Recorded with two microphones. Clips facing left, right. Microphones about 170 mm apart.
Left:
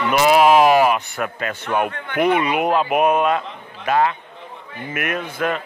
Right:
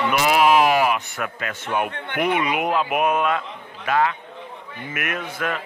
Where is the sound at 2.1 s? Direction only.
40° left (ahead or behind).